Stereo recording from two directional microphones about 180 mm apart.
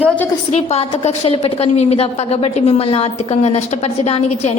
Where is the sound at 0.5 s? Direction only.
35° left (ahead or behind).